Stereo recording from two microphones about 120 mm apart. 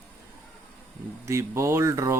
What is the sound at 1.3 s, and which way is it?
Speech, 25° right (ahead or behind).